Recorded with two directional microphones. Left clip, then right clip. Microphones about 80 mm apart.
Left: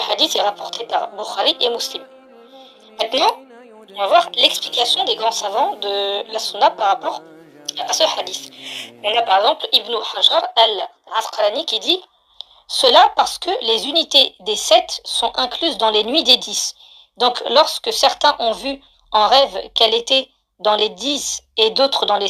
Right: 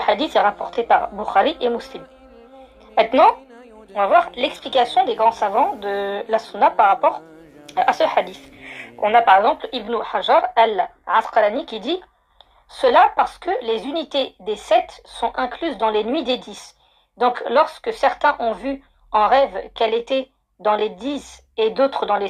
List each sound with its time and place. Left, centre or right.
0.0 s a woman's voice: left
3.1 s a woman's voice: left